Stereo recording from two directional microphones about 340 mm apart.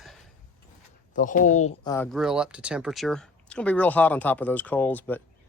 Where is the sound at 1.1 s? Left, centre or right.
Left.